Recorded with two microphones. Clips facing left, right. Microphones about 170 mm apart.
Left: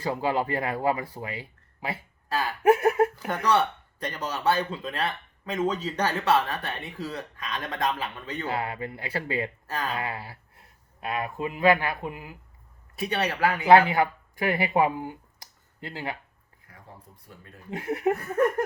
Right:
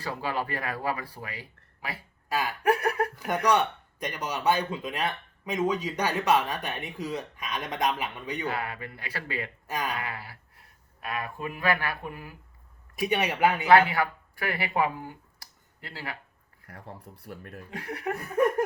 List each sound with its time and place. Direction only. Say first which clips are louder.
0.0 s speech: left 5 dB; 25° left (ahead or behind)
2.3 s speech: left 1 dB; 15° right (ahead or behind)
2.6 s a sound: left 6 dB; 25° left (ahead or behind)
3.2 s speech: even; 15° right (ahead or behind)
8.4 s speech: left 6 dB; 25° left (ahead or behind)
9.6 s speech: even; 15° right (ahead or behind)
9.9 s speech: left 3 dB; 25° left (ahead or behind)
13.0 s speech: right 1 dB; 15° right (ahead or behind)
13.7 s speech: left 4 dB; 25° left (ahead or behind)
16.6 s speech: right 5 dB; 75° right (ahead or behind)
17.7 s speech: left 9 dB; 25° left (ahead or behind)